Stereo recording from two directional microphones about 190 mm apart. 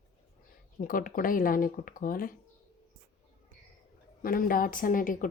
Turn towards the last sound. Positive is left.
turn(degrees=45)  # may be behind; listen again after turning